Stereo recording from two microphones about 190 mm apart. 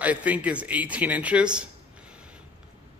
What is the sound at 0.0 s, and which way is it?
A man's voice, 10° right (ahead or behind).